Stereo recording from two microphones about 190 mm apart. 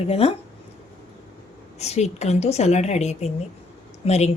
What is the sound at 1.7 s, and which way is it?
A woman's voice, 35° left (ahead or behind).